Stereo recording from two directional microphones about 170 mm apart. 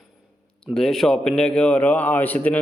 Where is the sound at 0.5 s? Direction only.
Centre (ahead or behind).